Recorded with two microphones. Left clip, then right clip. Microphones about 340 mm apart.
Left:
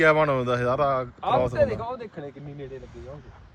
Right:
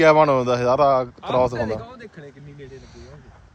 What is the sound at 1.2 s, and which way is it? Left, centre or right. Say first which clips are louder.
Speech: right 1 dB; centre.